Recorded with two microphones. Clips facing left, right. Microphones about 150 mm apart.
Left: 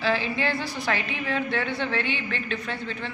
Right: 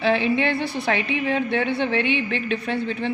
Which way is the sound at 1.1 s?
20° right (ahead or behind).